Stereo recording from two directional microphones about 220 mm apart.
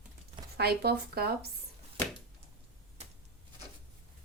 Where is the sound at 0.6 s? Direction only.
45° right (ahead or behind).